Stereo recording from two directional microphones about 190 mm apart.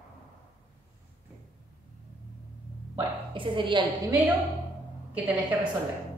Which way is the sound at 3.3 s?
25° right (ahead or behind).